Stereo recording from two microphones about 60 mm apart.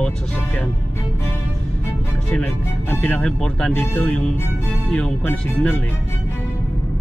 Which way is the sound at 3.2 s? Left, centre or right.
Centre.